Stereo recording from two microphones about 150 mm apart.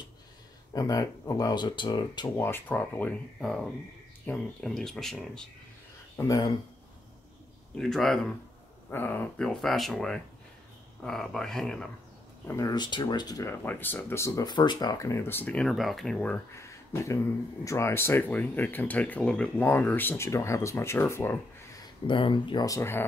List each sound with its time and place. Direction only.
0.7 s speech: 25° left (ahead or behind)
2.3 s speech: 15° left (ahead or behind)
6.1 s speech: 25° left (ahead or behind)
7.7 s speech: centre (ahead or behind)
8.9 s speech: 15° left (ahead or behind)
12.4 s speech: 20° left (ahead or behind)
13.6 s speech: 15° left (ahead or behind)
16.5 s a sound: 20° left (ahead or behind)
17.6 s speech: 20° left (ahead or behind)
21.8 s speech: 35° left (ahead or behind); by 23.0 s 15° left (ahead or behind)